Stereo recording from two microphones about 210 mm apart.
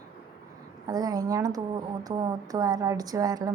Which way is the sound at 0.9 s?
15° right (ahead or behind).